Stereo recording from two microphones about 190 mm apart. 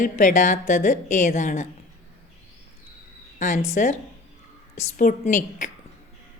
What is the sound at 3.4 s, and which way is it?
Speech, 40° left (ahead or behind).